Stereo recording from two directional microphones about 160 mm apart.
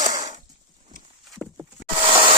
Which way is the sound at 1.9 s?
35° right (ahead or behind).